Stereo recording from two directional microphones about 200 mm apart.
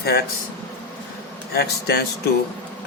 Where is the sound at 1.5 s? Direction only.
55° left (ahead or behind).